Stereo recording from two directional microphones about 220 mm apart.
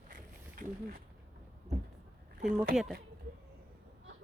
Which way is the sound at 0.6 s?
40° right (ahead or behind).